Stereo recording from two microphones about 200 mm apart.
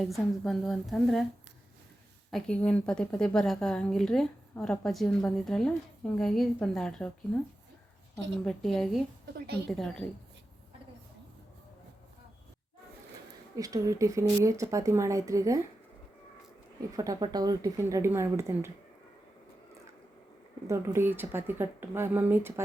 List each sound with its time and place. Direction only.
0.0 s a woman's voice: centre (ahead or behind)
2.3 s a woman's voice: 5° left (ahead or behind)
8.1 s a woman's voice: 5° left (ahead or behind)
13.6 s speech: 15° right (ahead or behind)
17.0 s speech: 20° right (ahead or behind)
20.7 s speech: 10° right (ahead or behind)